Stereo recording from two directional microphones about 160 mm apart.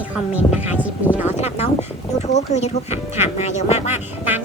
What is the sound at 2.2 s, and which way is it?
Speech, 45° left (ahead or behind).